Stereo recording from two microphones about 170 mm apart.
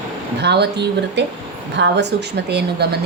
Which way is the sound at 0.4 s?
80° right.